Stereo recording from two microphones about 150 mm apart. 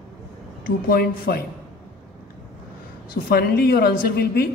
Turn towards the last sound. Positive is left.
turn(degrees=90)